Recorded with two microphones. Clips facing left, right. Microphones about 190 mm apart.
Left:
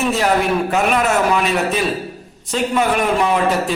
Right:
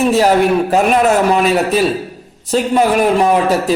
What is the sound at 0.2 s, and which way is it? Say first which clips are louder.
A man's voice: right 5 dB; 35° right (ahead or behind).